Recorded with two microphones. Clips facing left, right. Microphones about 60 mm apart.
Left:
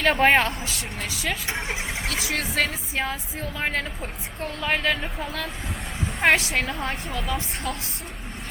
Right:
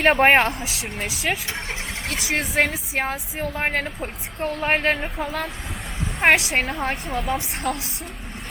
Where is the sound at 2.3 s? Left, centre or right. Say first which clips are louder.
Right 5 dB; right.